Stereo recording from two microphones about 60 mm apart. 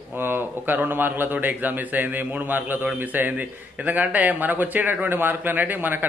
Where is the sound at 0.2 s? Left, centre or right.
Right.